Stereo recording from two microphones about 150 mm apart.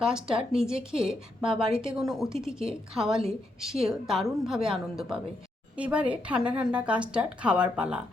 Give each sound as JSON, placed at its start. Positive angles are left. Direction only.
{"t": 0.0, "sound": "a woman's voice", "side_deg": -5}